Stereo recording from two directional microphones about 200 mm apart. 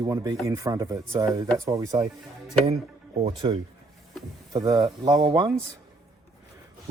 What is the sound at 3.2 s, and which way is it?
Speech, 25° right (ahead or behind).